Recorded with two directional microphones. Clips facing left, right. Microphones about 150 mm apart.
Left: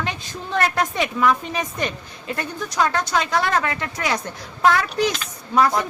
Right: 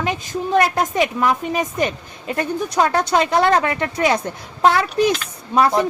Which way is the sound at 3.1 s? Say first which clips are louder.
Right 5 dB; 25° right (ahead or behind).